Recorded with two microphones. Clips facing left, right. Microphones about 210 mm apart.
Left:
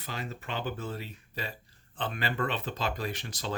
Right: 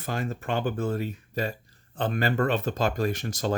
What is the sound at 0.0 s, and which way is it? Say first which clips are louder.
Speech: right 8 dB; 50° right (ahead or behind).